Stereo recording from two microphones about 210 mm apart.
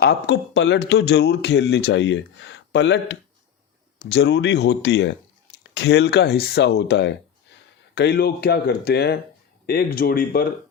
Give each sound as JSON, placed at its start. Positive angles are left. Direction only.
{"t": 0.0, "sound": "speech", "side_deg": 50}